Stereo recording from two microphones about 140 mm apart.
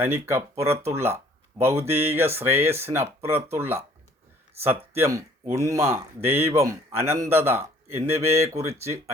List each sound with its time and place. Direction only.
0.0 s speech: 15° right (ahead or behind)
4.9 s speech: 20° right (ahead or behind)